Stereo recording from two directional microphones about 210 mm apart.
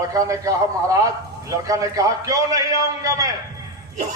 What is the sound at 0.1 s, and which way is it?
A man's voice, 15° right (ahead or behind).